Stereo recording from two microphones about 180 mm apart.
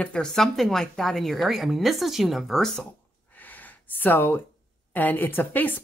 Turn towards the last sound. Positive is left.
turn(degrees=10)  # may be behind; listen again after turning